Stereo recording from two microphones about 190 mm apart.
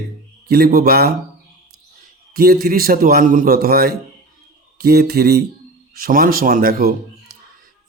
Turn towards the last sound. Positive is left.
turn(degrees=-50)  # may be behind; listen again after turning